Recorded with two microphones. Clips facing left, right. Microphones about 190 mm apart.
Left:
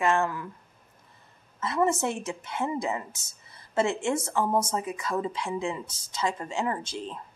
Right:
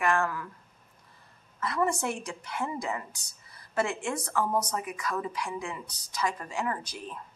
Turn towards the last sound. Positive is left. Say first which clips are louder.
# left 3 dB
turn(degrees=25)  # may be behind; listen again after turning